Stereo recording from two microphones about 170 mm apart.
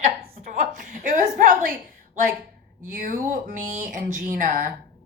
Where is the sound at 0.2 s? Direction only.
55° right (ahead or behind).